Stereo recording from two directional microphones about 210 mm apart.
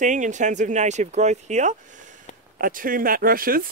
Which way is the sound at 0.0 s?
35° right (ahead or behind).